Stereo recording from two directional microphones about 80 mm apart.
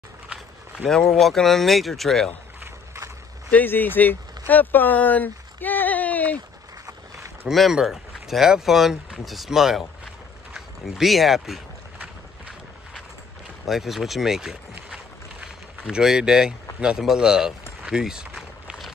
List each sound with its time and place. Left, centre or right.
0.8 s speech: centre
3.4 s speech: left
7.4 s speech: centre
13.7 s speech: centre
15.9 s speech: centre